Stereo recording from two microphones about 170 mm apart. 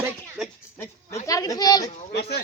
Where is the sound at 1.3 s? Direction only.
20° left (ahead or behind).